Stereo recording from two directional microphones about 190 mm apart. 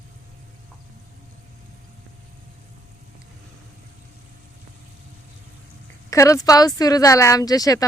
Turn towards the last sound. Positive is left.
turn(degrees=20)  # may be behind; listen again after turning